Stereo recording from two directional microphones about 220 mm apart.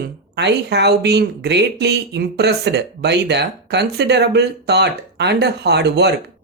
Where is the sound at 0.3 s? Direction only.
50° right (ahead or behind).